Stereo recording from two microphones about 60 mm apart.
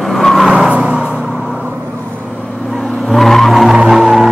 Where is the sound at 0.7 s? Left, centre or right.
Centre.